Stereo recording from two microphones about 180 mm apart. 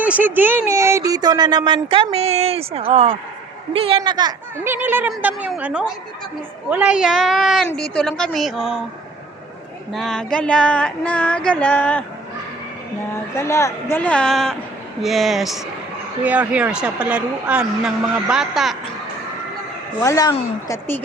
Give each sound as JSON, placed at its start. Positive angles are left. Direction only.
{"t": 0.0, "sound": "speech", "side_deg": -10}
{"t": 4.6, "sound": "speech", "side_deg": -10}
{"t": 9.9, "sound": "female singing", "side_deg": 0}
{"t": 13.3, "sound": "female singing", "side_deg": 15}
{"t": 13.9, "sound": "speech", "side_deg": 5}
{"t": 20.0, "sound": "a woman's voice", "side_deg": 20}
{"t": 20.7, "sound": "female singing", "side_deg": 10}